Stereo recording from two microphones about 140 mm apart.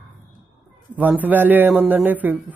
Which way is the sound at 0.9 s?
10° right (ahead or behind).